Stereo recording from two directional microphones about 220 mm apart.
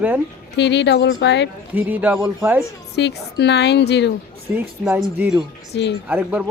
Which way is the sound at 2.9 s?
50° left (ahead or behind).